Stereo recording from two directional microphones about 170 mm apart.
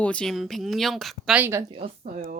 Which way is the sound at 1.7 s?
35° right (ahead or behind).